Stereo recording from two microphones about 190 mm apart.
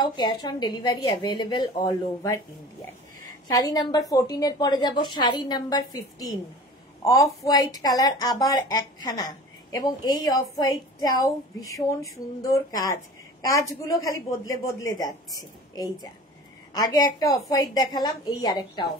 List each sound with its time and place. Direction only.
0.0 s a woman's voice: 20° left (ahead or behind)
3.4 s a woman's voice: 20° left (ahead or behind)